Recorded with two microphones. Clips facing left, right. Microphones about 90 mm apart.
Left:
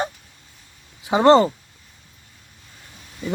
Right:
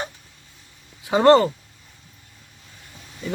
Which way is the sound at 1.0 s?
20° left (ahead or behind).